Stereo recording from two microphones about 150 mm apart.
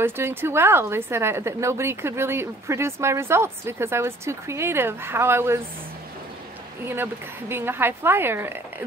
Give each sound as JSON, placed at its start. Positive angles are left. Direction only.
{"t": 0.0, "sound": "a woman's voice", "side_deg": -15}
{"t": 6.8, "sound": "a woman's voice", "side_deg": -15}